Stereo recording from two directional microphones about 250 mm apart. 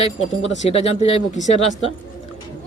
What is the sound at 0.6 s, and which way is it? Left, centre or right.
Speech, left.